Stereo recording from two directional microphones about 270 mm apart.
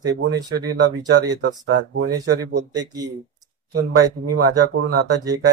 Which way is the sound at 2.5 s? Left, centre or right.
Centre.